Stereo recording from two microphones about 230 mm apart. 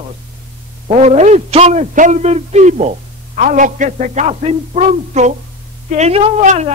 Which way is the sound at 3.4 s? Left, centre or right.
Right.